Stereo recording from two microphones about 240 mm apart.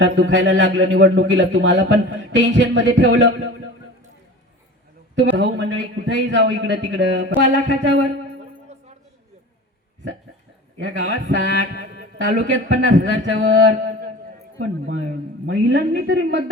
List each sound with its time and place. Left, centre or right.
0.0 s a man's voice: right
5.2 s a man's voice: right
10.8 s a man's voice: right